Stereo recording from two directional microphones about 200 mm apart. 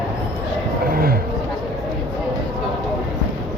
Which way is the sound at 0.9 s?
50° right (ahead or behind).